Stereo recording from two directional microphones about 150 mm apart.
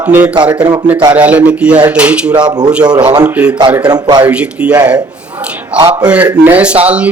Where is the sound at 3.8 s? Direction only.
25° right (ahead or behind).